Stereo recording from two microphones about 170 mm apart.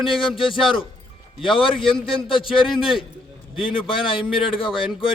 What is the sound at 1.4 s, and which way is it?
A man's voice, 30° left (ahead or behind).